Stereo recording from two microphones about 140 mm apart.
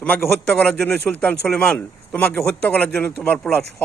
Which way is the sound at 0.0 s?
10° left (ahead or behind).